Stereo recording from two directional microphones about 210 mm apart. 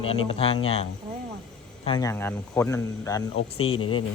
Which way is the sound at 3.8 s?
90° left.